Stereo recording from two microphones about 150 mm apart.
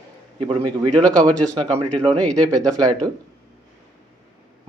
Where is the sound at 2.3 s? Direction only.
25° right (ahead or behind).